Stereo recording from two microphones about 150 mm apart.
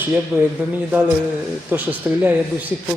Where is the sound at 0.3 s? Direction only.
15° right (ahead or behind).